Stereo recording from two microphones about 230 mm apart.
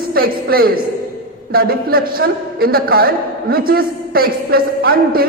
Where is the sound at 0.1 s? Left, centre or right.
Right.